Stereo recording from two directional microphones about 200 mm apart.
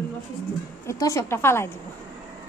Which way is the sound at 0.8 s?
15° left (ahead or behind).